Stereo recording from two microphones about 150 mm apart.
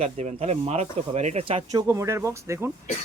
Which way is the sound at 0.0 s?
50° right (ahead or behind).